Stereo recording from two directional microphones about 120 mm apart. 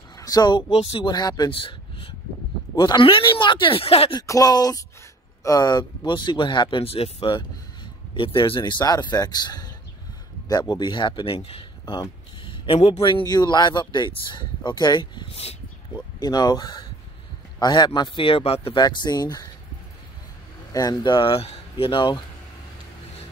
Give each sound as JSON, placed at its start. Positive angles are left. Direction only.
{"t": 0.2, "sound": "speech", "side_deg": 35}
{"t": 1.5, "sound": "a sound", "side_deg": 45}
{"t": 2.7, "sound": "speech", "side_deg": 40}
{"t": 4.3, "sound": "speech", "side_deg": 30}
{"t": 10.7, "sound": "speech", "side_deg": 40}
{"t": 11.8, "sound": "speech", "side_deg": 30}
{"t": 12.4, "sound": "a sound", "side_deg": 50}
{"t": 13.0, "sound": "speech", "side_deg": 40}
{"t": 18.8, "sound": "speech", "side_deg": 35}
{"t": 20.7, "sound": "speech", "side_deg": 35}